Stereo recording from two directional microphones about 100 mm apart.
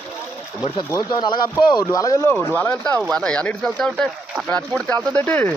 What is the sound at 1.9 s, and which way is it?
Speech, 35° left (ahead or behind).